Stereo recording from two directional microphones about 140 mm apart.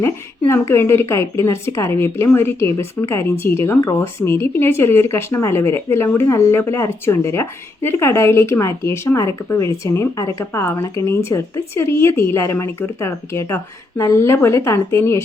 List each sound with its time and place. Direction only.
0.0 s speech: 20° left (ahead or behind)